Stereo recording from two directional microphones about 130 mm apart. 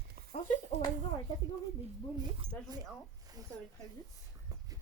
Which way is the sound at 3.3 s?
30° right (ahead or behind).